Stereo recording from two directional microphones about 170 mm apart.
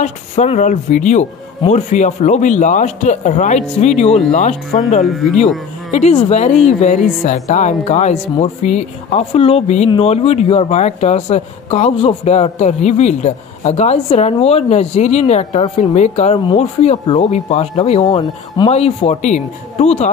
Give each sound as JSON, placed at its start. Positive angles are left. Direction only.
{"t": 0.0, "sound": "speech", "side_deg": 45}
{"t": 5.0, "sound": "speech", "side_deg": 0}
{"t": 5.9, "sound": "speech", "side_deg": 40}
{"t": 18.0, "sound": "speech", "side_deg": 25}
{"t": 18.7, "sound": "speech", "side_deg": 40}